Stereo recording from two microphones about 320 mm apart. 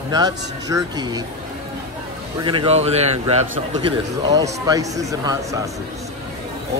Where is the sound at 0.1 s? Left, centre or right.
Centre.